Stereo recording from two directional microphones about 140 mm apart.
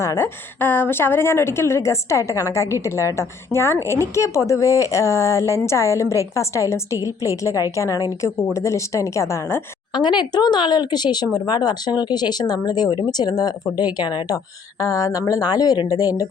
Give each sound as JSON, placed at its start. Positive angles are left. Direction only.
{"t": 0.0, "sound": "a woman's voice", "side_deg": 20}
{"t": 9.9, "sound": "speech", "side_deg": 30}